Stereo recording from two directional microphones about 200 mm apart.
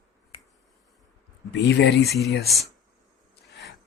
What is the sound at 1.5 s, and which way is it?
Speech, 60° left (ahead or behind).